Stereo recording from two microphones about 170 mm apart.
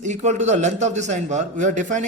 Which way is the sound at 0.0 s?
45° right (ahead or behind).